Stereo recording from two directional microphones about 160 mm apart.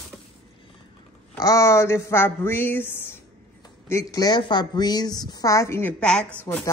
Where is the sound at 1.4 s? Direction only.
20° left (ahead or behind).